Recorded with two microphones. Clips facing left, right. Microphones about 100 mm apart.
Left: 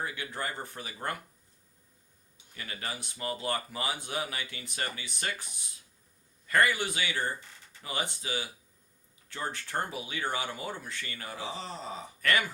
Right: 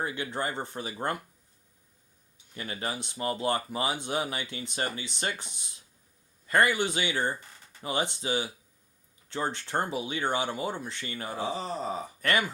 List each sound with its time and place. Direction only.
0.0 s speech: 25° right (ahead or behind)
2.6 s speech: 25° right (ahead or behind)